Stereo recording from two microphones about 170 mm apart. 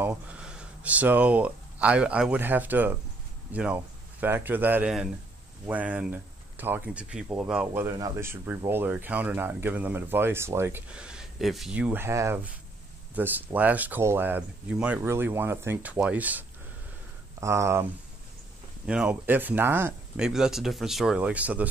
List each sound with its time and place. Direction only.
0.0 s speech: 10° right (ahead or behind)
18.9 s speech: 5° right (ahead or behind)